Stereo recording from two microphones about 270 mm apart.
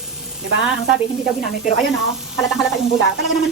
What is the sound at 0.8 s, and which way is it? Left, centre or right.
Speech, centre.